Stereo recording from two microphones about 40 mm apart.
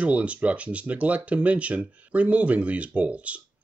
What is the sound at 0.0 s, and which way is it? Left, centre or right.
Speech, right.